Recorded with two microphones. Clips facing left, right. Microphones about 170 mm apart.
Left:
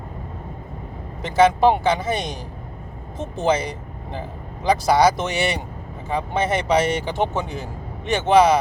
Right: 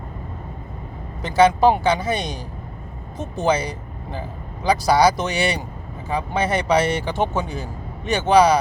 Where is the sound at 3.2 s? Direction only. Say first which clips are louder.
Even; 25° left (ahead or behind).